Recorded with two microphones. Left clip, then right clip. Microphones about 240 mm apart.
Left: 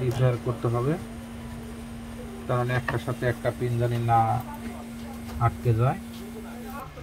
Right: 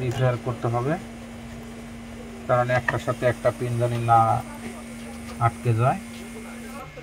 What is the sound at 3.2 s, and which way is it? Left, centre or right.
A man's voice, right.